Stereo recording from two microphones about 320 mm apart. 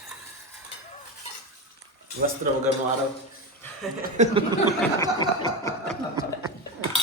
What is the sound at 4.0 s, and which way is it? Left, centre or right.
Speech, right.